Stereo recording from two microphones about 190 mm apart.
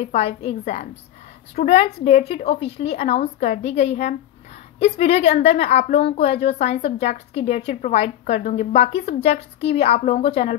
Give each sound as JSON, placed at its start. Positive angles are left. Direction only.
{"t": 0.0, "sound": "a woman's voice", "side_deg": 35}